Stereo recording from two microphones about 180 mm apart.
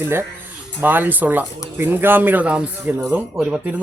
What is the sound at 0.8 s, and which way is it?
Speech, 10° right (ahead or behind).